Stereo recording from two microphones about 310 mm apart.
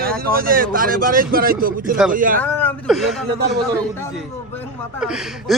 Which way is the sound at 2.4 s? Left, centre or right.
Centre.